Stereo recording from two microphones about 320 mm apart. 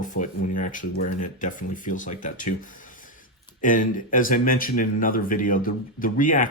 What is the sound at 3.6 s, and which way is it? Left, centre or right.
Speech, left.